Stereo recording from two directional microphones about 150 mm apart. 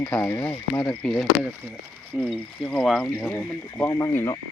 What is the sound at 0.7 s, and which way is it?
Speech, 5° left (ahead or behind).